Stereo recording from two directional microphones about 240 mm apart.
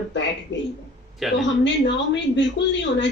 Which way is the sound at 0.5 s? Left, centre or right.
Left.